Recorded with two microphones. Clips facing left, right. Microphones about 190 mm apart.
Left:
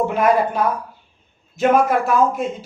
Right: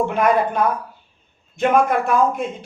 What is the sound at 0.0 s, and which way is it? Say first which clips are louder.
Speech: left 1 dB; 5° left (ahead or behind).